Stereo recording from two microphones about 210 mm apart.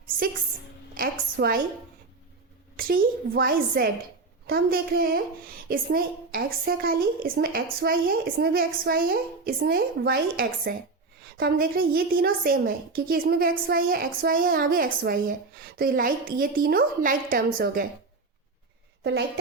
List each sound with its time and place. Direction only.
0.9 s a woman's voice: 45° right (ahead or behind)
2.7 s a woman's voice: 45° right (ahead or behind)